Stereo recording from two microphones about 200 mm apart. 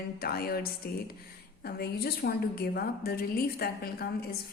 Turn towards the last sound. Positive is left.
turn(degrees=50)  # may be behind; listen again after turning